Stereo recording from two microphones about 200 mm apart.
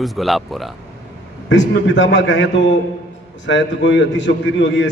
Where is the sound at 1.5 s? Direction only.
65° left (ahead or behind).